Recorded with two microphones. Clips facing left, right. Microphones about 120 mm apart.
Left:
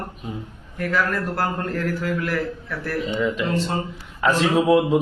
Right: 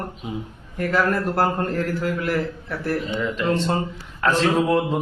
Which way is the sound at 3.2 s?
Centre (ahead or behind).